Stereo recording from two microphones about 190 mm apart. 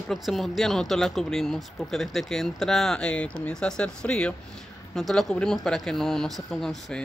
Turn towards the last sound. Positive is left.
turn(degrees=0)  # may be behind; listen again after turning